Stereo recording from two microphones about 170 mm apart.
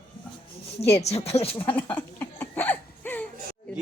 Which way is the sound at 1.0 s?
40° left (ahead or behind).